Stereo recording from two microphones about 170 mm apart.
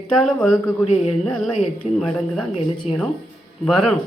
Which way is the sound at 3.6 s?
Centre (ahead or behind).